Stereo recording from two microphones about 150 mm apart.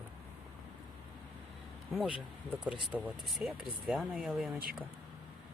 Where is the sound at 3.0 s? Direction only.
Centre (ahead or behind).